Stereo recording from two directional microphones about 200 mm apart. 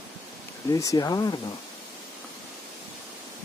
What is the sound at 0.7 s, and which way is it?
Speech, 15° left (ahead or behind).